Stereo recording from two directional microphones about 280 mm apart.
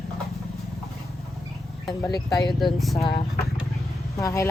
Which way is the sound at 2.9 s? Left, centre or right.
Centre.